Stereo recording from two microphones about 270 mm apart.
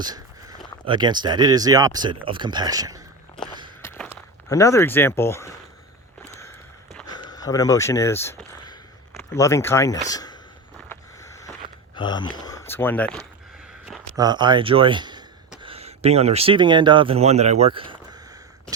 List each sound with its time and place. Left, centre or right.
0.0 s a sound: centre
0.9 s speech: centre
3.8 s walk: centre
4.4 s speech: centre
7.1 s a sound: centre
9.1 s speech: centre
10.8 s a sound: centre
11.9 s speech: centre
14.2 s speech: centre